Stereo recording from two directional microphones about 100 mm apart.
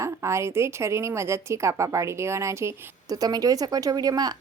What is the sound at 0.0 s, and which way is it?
A woman's voice, 30° right (ahead or behind).